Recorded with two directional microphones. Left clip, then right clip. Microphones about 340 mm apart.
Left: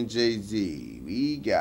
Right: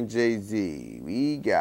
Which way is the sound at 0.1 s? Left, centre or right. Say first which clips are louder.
Right 2 dB; right.